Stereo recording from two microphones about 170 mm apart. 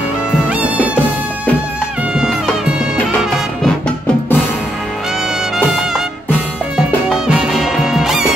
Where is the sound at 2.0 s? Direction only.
Centre (ahead or behind).